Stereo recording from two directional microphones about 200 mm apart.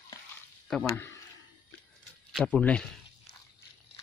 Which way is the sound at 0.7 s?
5° left (ahead or behind).